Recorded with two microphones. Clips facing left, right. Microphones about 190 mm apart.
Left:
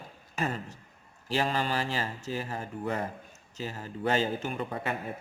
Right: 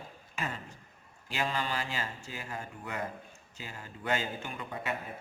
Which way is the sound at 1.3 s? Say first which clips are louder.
Left 5 dB; 40° left (ahead or behind).